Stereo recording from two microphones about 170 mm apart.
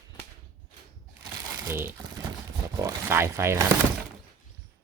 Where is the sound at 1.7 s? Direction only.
15° right (ahead or behind).